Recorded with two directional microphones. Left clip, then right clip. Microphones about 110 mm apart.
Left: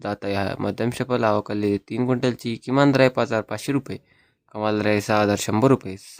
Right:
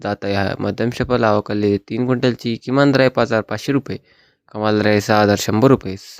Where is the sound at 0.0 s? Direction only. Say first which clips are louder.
Right 5 dB; 30° right (ahead or behind).